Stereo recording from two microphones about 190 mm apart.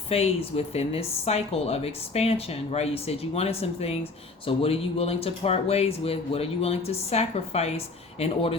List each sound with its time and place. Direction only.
0.1 s a woman's voice: 30° left (ahead or behind)